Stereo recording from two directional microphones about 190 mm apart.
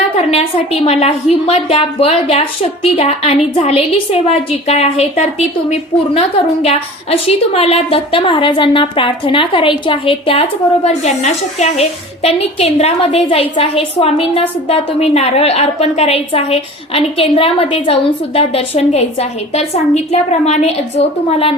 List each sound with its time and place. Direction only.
0.2 s a woman's voice: 35° left (ahead or behind)